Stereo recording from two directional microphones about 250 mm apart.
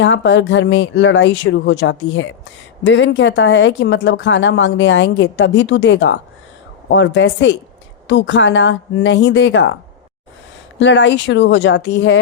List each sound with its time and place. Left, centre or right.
0.0 s speech: left
10.8 s speech: left